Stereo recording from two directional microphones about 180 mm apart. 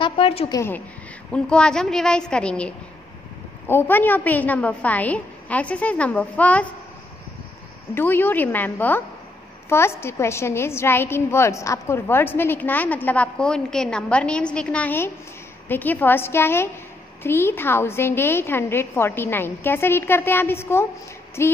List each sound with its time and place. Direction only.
0.0 s a sound: 30° left (ahead or behind)
0.5 s a woman's voice: 15° left (ahead or behind)
7.9 s a woman's voice: 10° left (ahead or behind)